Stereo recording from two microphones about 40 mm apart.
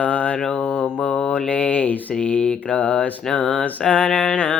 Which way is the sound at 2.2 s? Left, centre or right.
Left.